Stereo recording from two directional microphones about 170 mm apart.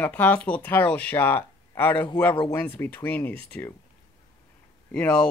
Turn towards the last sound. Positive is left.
turn(degrees=5)  # may be behind; listen again after turning